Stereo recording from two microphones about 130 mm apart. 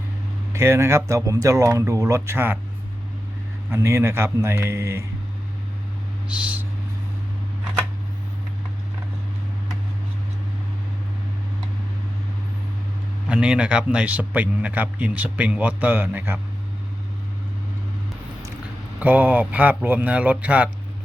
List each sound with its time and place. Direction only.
0.5 s speech: 20° right (ahead or behind)
3.7 s speech: 20° right (ahead or behind)
6.4 s a sound: 10° right (ahead or behind)
13.2 s a man's voice: 10° right (ahead or behind)
18.9 s a man's voice: 10° right (ahead or behind)